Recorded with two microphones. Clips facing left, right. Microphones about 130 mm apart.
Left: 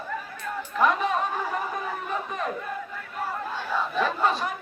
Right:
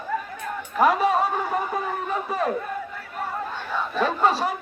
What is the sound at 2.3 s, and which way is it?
Speech, 35° right (ahead or behind).